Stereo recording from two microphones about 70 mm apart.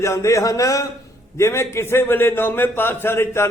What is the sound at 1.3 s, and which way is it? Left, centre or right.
A man's voice, left.